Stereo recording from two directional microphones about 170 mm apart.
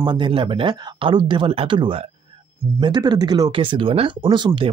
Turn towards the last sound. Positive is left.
turn(degrees=-25)  # may be behind; listen again after turning